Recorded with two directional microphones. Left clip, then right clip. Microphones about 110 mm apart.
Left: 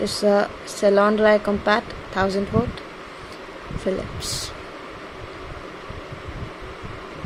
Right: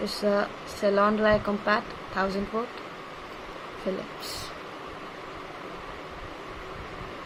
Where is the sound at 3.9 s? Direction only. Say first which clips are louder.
Left 7 dB; 65° left (ahead or behind).